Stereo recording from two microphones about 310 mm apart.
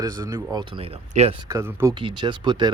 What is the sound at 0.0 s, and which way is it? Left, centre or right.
Speech, centre.